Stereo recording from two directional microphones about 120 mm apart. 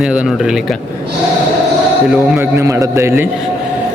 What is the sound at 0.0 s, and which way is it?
Speech, 10° right (ahead or behind).